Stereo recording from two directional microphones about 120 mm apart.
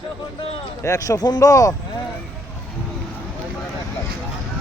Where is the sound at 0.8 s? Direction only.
30° left (ahead or behind).